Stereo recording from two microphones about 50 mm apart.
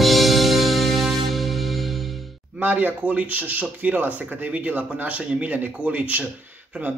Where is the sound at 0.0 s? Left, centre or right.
Centre.